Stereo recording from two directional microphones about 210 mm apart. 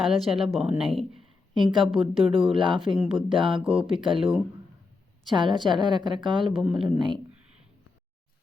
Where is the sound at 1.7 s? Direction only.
25° right (ahead or behind).